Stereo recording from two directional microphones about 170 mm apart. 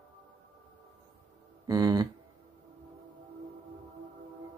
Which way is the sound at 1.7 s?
25° right (ahead or behind).